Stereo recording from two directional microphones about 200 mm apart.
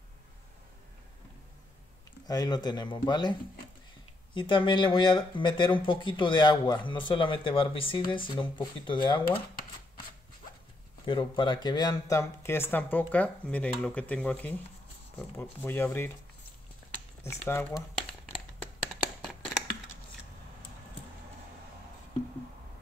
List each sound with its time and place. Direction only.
2.2 s speech: 20° left (ahead or behind)
11.1 s speech: 25° left (ahead or behind)
17.2 s speech: 15° left (ahead or behind)